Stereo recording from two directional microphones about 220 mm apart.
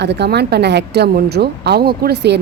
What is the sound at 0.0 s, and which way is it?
Speech, 50° right (ahead or behind).